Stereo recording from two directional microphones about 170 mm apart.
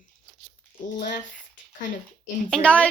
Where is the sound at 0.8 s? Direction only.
50° left (ahead or behind).